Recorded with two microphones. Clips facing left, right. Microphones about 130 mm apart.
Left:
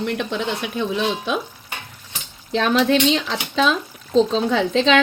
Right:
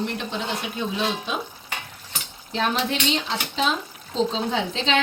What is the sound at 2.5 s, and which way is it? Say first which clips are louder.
Speech: left 7 dB; 90° left.